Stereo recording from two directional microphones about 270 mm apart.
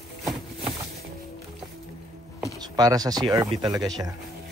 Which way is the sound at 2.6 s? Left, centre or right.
Centre.